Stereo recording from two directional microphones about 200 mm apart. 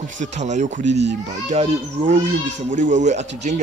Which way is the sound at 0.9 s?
60° right (ahead or behind).